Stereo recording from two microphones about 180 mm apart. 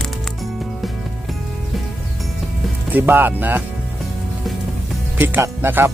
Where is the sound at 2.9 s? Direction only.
10° right (ahead or behind).